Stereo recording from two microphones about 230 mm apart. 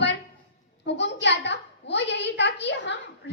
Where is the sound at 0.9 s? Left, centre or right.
Left.